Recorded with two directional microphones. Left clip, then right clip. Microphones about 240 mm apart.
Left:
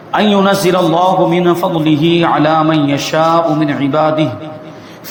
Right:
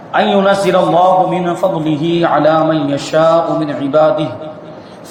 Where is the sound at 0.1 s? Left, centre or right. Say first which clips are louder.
Even; left.